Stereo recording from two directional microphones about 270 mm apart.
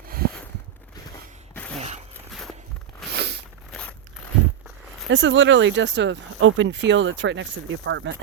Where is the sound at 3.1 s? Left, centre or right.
Right.